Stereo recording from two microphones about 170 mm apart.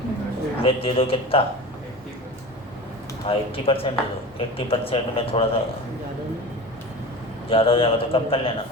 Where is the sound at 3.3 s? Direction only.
35° left (ahead or behind).